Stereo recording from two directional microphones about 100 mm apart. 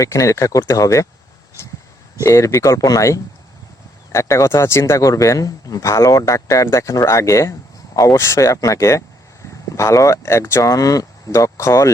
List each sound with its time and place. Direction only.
0.0 s a man's voice: 30° left (ahead or behind)
1.6 s a sound: 25° left (ahead or behind)
2.2 s a man's voice: 30° left (ahead or behind)